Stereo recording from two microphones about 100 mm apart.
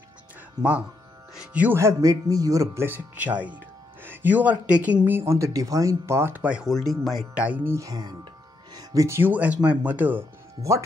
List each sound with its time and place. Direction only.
0.6 s speech: 15° right (ahead or behind)
1.8 s speech: 30° right (ahead or behind); by 6.7 s 10° right (ahead or behind)
6.7 s speech: centre (ahead or behind)
7.3 s speech: 15° right (ahead or behind)
7.7 s speech: 35° right (ahead or behind)
8.7 s music: 35° right (ahead or behind)
9.2 s speech: 15° right (ahead or behind)